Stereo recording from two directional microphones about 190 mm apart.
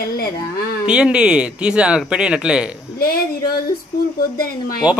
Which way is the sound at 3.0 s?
50° left (ahead or behind).